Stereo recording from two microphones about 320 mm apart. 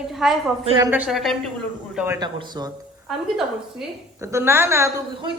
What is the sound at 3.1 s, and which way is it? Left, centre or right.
A woman's voice, centre.